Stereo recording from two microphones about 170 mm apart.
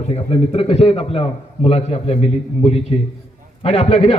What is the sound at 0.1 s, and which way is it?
A man's voice, 35° left (ahead or behind).